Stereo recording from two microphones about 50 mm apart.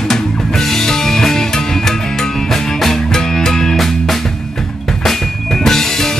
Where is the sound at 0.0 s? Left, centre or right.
Centre.